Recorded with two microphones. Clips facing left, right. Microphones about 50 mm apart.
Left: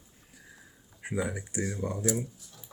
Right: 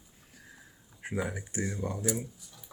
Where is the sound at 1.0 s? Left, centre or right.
Centre.